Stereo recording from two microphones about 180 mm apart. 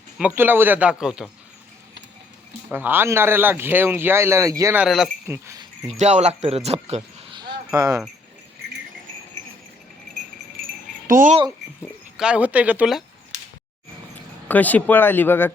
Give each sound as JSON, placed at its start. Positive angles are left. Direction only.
{"t": 0.2, "sound": "speech", "side_deg": -10}
{"t": 2.7, "sound": "speech", "side_deg": -10}
{"t": 5.9, "sound": "speech", "side_deg": -40}
{"t": 11.0, "sound": "speech", "side_deg": -50}
{"t": 12.1, "sound": "speech", "side_deg": -5}
{"t": 13.3, "sound": "a sound", "side_deg": -40}
{"t": 14.4, "sound": "speech", "side_deg": 10}